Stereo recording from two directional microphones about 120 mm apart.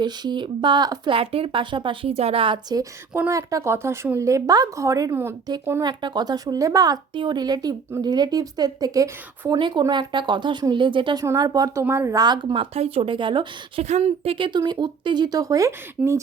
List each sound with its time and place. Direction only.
0.0 s a woman's voice: 40° right (ahead or behind)
3.2 s a woman's voice: 25° right (ahead or behind)
12.2 s a woman's voice: 35° right (ahead or behind)
12.7 s a woman's voice: 55° right (ahead or behind)
13.8 s a woman's voice: 65° right (ahead or behind); by 15.7 s 30° right (ahead or behind)